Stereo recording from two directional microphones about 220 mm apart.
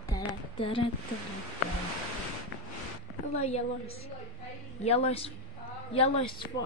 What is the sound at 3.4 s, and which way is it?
A woman's voice, 30° left (ahead or behind).